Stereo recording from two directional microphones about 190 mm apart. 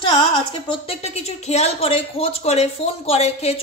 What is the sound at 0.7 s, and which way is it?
Speech, 35° left (ahead or behind).